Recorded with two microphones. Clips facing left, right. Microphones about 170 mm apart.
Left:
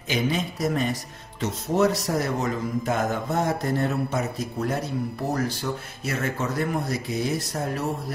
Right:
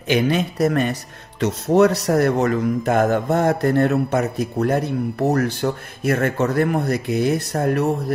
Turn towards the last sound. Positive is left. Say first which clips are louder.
# right 8 dB
turn(degrees=-60)  # may be behind; listen again after turning